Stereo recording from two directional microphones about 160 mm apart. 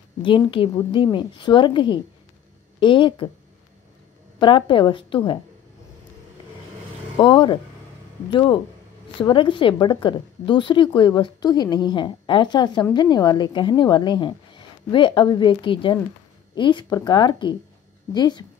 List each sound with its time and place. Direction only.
0.6 s a woman's voice: 35° left (ahead or behind)
4.4 s a woman's voice: 30° left (ahead or behind)
7.2 s a woman's voice: 30° left (ahead or behind)